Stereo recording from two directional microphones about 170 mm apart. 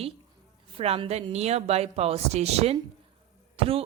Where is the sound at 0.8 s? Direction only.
35° right (ahead or behind).